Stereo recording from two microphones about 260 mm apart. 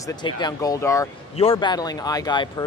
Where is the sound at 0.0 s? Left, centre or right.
Centre.